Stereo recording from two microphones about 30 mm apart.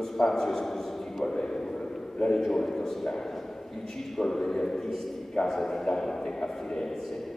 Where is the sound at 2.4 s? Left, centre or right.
Centre.